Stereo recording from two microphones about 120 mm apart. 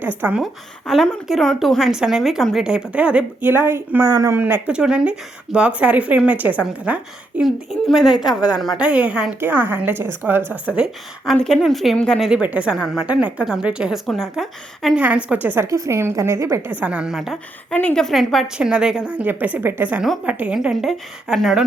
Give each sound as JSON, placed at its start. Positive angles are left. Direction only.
{"t": 0.2, "sound": "speech", "side_deg": -15}
{"t": 0.4, "sound": "a woman's voice", "side_deg": 0}
{"t": 11.3, "sound": "a woman's voice", "side_deg": 5}
{"t": 12.3, "sound": "a woman's voice", "side_deg": -10}
{"t": 14.9, "sound": "a woman's voice", "side_deg": -10}
{"t": 16.8, "sound": "a woman's voice", "side_deg": -10}
{"t": 17.7, "sound": "speech", "side_deg": 10}